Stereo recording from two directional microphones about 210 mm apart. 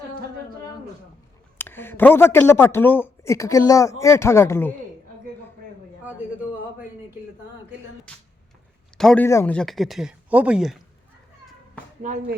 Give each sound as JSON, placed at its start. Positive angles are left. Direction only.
{"t": 1.5, "sound": "a man's voice", "side_deg": 10}
{"t": 8.1, "sound": "speech", "side_deg": 5}
{"t": 12.0, "sound": "speech", "side_deg": -35}